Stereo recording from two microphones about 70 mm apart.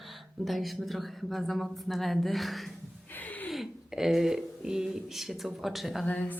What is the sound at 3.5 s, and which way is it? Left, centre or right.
Speech, centre.